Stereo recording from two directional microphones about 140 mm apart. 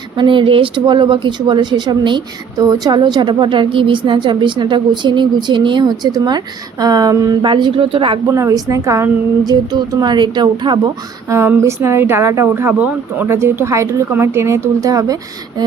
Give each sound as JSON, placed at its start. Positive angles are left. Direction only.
{"t": 0.2, "sound": "speech", "side_deg": -35}
{"t": 8.3, "sound": "a woman's voice", "side_deg": -25}
{"t": 11.3, "sound": "a woman's voice", "side_deg": -20}